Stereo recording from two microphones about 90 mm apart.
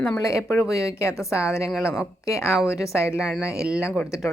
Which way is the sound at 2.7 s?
35° left (ahead or behind).